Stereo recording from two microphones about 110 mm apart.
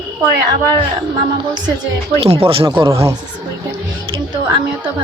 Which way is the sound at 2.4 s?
55° right (ahead or behind).